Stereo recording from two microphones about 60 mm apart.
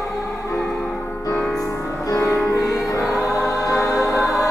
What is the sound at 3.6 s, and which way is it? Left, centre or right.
Music, left.